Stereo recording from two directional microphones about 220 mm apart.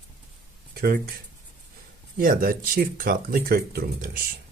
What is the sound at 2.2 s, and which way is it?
Speech, 40° right (ahead or behind).